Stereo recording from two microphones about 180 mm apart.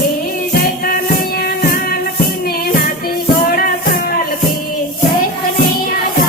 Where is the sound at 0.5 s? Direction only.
55° left (ahead or behind).